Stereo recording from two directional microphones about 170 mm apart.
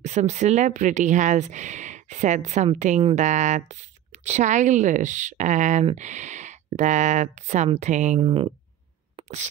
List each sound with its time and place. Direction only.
0.0 s speech: 45° right (ahead or behind)
8.2 s speech: 35° right (ahead or behind)